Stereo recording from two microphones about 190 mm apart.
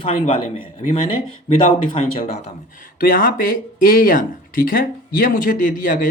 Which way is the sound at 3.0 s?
50° left (ahead or behind).